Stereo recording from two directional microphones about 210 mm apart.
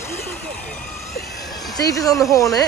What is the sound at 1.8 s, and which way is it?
Speech, 15° left (ahead or behind).